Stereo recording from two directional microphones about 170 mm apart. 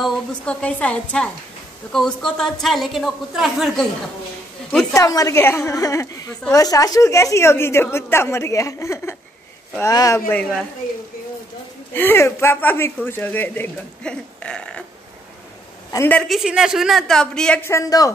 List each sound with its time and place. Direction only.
0.0 s speech: 5° left (ahead or behind)
4.9 s a woman's voice: 20° left (ahead or behind)
11.9 s speech: 10° left (ahead or behind)
15.9 s a man's voice: 15° left (ahead or behind)
16.2 s speech: centre (ahead or behind); by 18.1 s 20° left (ahead or behind)